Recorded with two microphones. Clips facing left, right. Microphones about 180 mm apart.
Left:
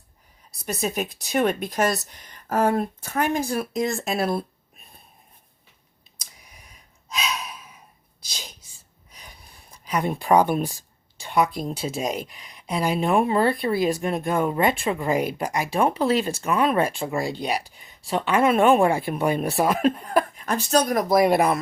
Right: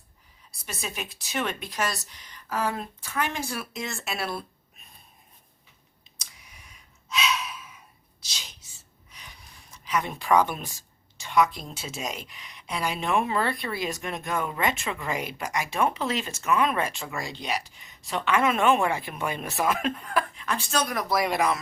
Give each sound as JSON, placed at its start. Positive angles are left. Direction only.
{"t": 0.6, "sound": "speech", "side_deg": 40}
{"t": 6.5, "sound": "breathing", "side_deg": 35}
{"t": 8.3, "sound": "a sound", "side_deg": 50}
{"t": 9.1, "sound": "speech", "side_deg": 35}
{"t": 21.2, "sound": "speech", "side_deg": 55}